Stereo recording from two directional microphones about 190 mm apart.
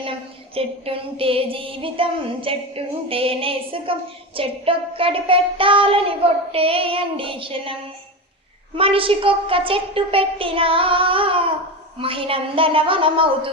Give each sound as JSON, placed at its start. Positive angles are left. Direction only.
{"t": 0.0, "sound": "music", "side_deg": -30}